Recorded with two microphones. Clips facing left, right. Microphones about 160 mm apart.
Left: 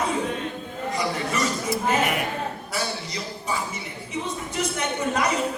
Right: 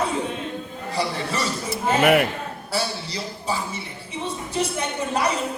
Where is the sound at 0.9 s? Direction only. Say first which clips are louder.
Right 1 dB; 30° right (ahead or behind).